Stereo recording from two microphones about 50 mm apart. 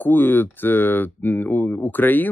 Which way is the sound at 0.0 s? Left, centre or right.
Left.